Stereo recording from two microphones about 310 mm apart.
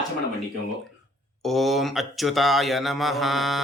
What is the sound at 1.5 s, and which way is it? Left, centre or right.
Mantra, centre.